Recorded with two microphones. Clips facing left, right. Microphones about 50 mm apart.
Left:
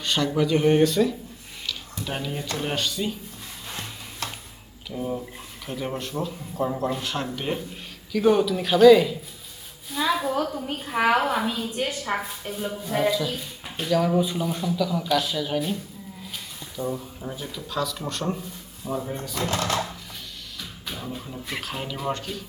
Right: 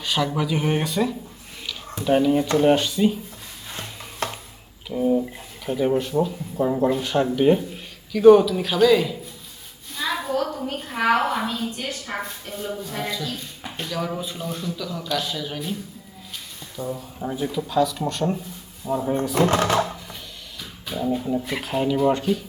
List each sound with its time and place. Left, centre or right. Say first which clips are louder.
0.0 s speech: even; centre
5.2 s speech: right 6 dB; centre
9.9 s a sound: left 1 dB; centre
10.7 s a woman's voice: even; centre
12.1 s speech: left 2 dB; centre
16.7 s speech: left 1 dB; centre
17.2 s speech: right 8 dB; centre
18.8 s speech: right 4 dB; left
19.4 s speech: right 6 dB; right
20.9 s speech: right 13 dB; centre